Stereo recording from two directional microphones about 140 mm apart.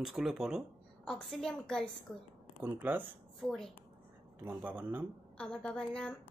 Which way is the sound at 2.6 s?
10° right (ahead or behind).